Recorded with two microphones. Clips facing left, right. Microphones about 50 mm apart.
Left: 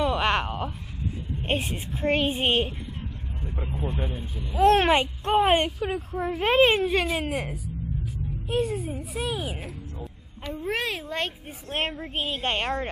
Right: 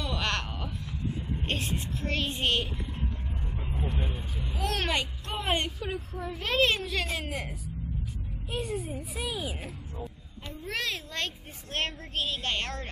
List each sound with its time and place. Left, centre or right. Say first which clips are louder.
0.0 s a sound: left 8 dB; left
1.5 s a child's voice: left 5 dB; centre
2.0 s a child's voice: left 9 dB; left
3.4 s vehicle: left 5 dB; centre
4.6 s speech: left 12 dB; left
5.5 s a child's voice: left 7 dB; centre
6.2 s a child's voice: left 7 dB; left; by 12.1 s centre
12.2 s a child's voice: left 4 dB; left